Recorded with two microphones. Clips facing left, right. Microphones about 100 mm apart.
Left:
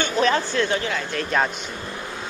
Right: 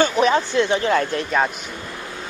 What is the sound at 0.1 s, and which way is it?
Speech, 15° right (ahead or behind).